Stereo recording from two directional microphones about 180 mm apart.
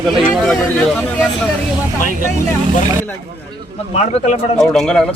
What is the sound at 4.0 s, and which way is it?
Speech, 40° left (ahead or behind).